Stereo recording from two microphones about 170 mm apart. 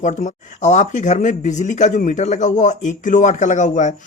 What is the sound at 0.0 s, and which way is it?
Speech, 45° left (ahead or behind).